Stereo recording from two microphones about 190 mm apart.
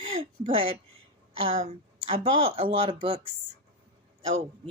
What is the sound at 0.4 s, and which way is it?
A woman's voice, 30° right (ahead or behind).